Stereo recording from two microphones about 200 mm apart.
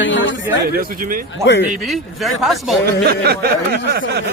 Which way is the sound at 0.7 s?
45° right (ahead or behind).